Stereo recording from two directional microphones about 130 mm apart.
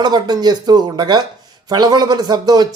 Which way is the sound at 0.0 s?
30° right (ahead or behind).